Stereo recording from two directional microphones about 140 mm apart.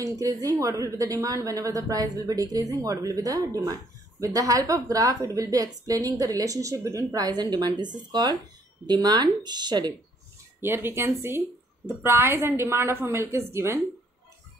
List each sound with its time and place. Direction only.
0.0 s a woman's voice: 25° right (ahead or behind)
10.6 s a woman's voice: 15° right (ahead or behind)